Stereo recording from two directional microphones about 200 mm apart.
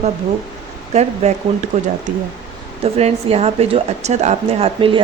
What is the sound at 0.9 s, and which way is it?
A woman's voice, 35° right (ahead or behind).